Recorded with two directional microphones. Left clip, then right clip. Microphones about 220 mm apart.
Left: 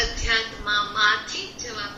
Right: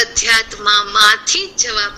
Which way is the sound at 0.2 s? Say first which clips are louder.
Right 10 dB; 55° right (ahead or behind).